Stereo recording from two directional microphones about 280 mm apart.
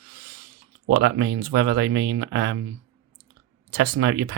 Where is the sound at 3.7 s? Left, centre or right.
Right.